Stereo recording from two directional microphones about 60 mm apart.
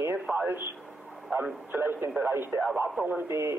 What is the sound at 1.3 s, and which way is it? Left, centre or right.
Speech, right.